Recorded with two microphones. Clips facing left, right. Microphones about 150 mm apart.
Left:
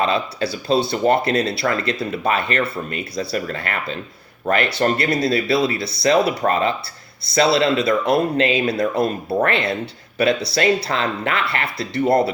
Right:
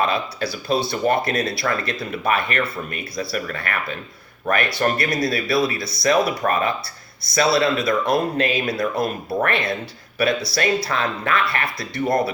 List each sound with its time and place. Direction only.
0.1 s speech: 25° left (ahead or behind)